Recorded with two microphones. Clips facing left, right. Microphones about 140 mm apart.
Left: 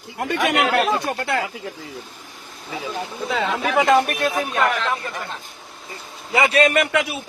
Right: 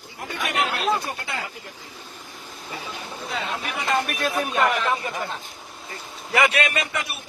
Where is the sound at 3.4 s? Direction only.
90° left.